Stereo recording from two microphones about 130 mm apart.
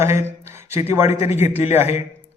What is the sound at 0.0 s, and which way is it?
Speech, 20° right (ahead or behind).